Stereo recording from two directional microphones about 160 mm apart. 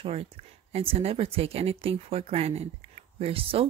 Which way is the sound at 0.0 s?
40° right (ahead or behind).